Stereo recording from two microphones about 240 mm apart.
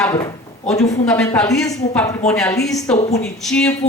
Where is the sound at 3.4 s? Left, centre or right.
Centre.